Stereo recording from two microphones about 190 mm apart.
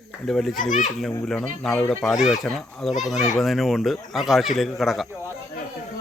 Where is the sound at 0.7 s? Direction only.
45° left (ahead or behind).